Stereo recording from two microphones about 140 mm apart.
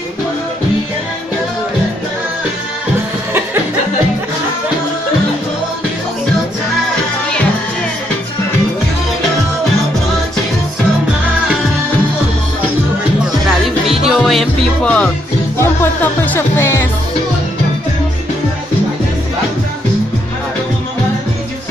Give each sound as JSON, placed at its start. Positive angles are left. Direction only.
{"t": 13.8, "sound": "music", "side_deg": 0}